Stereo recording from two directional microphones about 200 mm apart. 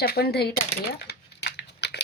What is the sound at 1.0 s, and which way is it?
Crumpling, 55° left (ahead or behind).